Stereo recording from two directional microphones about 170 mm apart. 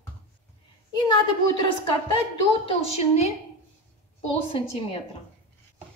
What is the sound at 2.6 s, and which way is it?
Speech, 40° left (ahead or behind).